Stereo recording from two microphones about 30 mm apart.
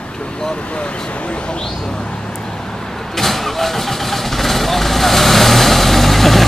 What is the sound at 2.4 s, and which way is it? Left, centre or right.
Vehicle, centre.